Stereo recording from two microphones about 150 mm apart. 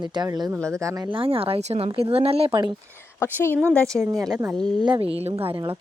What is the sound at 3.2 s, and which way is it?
Speech, 15° left (ahead or behind).